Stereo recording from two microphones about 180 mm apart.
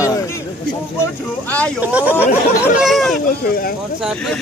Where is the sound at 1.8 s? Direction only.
10° right (ahead or behind).